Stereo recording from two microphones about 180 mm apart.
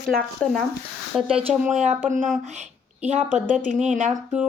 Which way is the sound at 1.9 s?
45° right (ahead or behind).